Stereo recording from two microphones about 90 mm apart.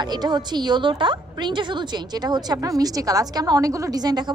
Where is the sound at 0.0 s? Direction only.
50° right (ahead or behind).